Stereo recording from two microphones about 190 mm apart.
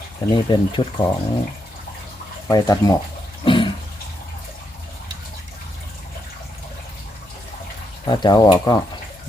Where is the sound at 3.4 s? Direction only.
25° left (ahead or behind).